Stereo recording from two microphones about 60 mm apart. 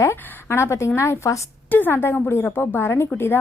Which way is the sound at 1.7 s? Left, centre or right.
Left.